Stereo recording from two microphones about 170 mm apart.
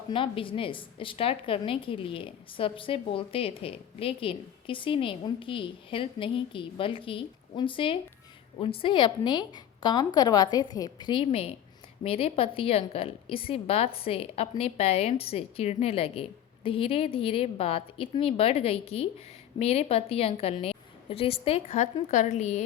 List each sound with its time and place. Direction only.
0.1 s a woman's voice: 30° left (ahead or behind)